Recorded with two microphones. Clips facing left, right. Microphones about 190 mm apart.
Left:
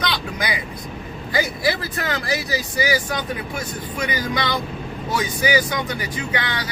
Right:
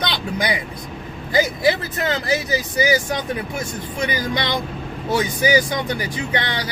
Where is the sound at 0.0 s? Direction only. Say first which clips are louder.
Right 2 dB; 25° right (ahead or behind).